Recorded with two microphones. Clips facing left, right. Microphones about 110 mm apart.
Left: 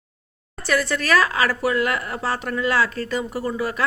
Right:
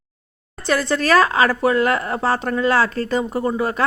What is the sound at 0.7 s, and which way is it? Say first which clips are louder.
A woman's voice: right 3 dB; 30° right (ahead or behind).